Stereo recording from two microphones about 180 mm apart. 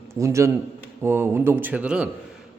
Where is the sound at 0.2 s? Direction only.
15° right (ahead or behind).